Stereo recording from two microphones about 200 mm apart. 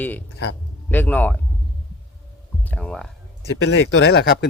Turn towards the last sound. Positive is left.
turn(degrees=50)  # may be behind; listen again after turning